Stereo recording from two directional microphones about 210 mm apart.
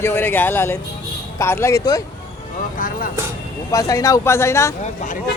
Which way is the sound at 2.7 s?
40° left (ahead or behind).